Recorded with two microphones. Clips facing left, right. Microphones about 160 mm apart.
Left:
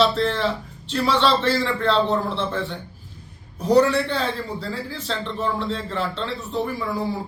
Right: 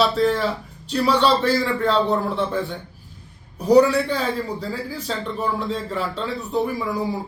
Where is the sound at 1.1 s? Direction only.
40° right (ahead or behind).